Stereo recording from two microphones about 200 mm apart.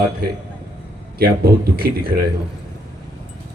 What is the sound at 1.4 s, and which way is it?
Speech, 50° right (ahead or behind).